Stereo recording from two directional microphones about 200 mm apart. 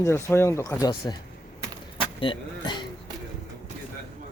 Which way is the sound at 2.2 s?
25° left (ahead or behind).